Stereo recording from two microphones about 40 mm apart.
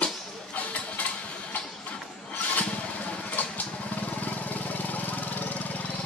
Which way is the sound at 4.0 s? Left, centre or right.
Left.